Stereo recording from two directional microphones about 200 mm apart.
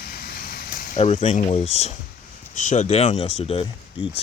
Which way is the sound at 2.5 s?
35° left (ahead or behind).